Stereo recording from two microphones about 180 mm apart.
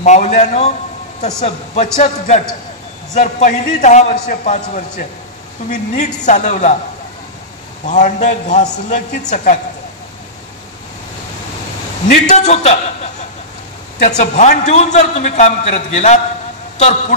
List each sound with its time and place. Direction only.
0.0 s a man's voice: 40° left (ahead or behind)
7.8 s a man's voice: 45° left (ahead or behind)
12.1 s a man's voice: 40° left (ahead or behind)